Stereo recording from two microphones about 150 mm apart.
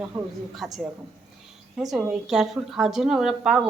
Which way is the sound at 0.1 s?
5° right (ahead or behind).